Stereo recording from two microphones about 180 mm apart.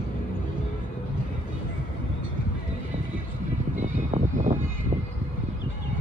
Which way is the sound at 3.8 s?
45° right (ahead or behind).